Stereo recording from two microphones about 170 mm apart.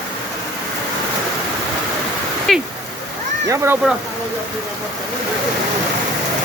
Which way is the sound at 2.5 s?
Centre (ahead or behind).